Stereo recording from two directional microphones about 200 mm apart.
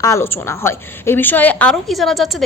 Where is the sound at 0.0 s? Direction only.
15° left (ahead or behind).